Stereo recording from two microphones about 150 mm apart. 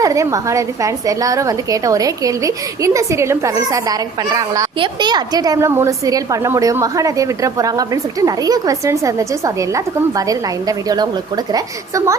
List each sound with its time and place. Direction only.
0.0 s a woman's voice: 20° right (ahead or behind)